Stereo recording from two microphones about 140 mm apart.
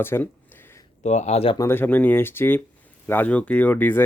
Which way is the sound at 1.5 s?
20° left (ahead or behind).